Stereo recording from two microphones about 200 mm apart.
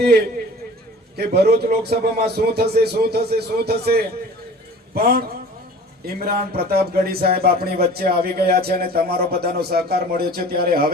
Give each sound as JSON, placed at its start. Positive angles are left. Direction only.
{"t": 1.1, "sound": "speech", "side_deg": -55}